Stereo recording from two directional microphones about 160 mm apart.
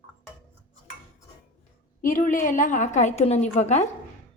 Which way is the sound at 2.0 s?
55° left (ahead or behind).